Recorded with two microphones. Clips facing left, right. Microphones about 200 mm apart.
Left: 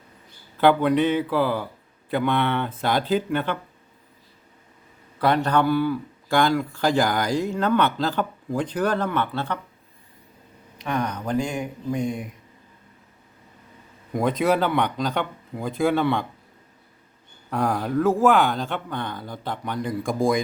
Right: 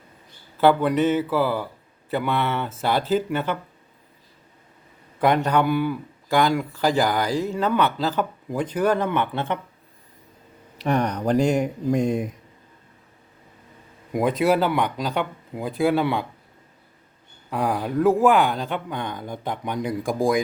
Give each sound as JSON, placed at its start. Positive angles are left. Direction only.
{"t": 0.6, "sound": "speech", "side_deg": -10}
{"t": 5.2, "sound": "speech", "side_deg": -15}
{"t": 10.8, "sound": "speech", "side_deg": -40}
{"t": 14.1, "sound": "speech", "side_deg": -5}
{"t": 17.5, "sound": "speech", "side_deg": -10}
{"t": 20.1, "sound": "speech", "side_deg": 0}